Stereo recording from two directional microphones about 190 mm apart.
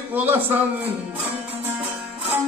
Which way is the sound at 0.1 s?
10° right (ahead or behind).